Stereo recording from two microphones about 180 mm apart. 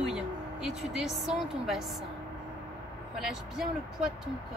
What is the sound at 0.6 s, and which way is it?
Speech, centre (ahead or behind).